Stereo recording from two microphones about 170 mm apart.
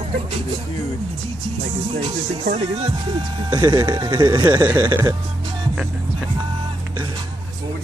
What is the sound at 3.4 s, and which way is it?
Speech, 25° right (ahead or behind).